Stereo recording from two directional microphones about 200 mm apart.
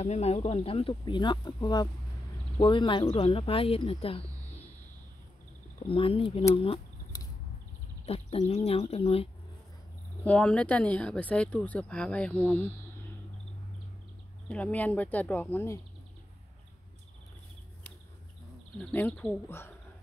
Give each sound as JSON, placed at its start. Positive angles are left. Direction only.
{"t": 0.0, "sound": "speech", "side_deg": 30}
{"t": 5.8, "sound": "speech", "side_deg": 25}
{"t": 6.5, "sound": "insect", "side_deg": 25}
{"t": 8.0, "sound": "speech", "side_deg": 30}
{"t": 10.2, "sound": "speech", "side_deg": 5}
{"t": 14.5, "sound": "speech", "side_deg": 5}
{"t": 18.8, "sound": "speech", "side_deg": 5}